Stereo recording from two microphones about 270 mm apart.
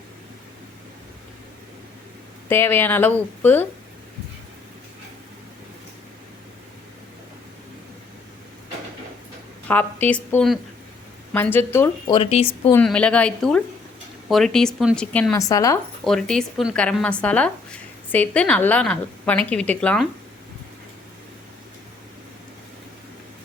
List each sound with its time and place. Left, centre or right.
2.5 s speech: centre
9.6 s a woman's voice: centre
12.7 s a woman's voice: centre